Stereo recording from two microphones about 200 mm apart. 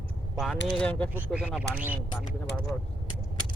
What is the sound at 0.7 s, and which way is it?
Speech, 5° left (ahead or behind).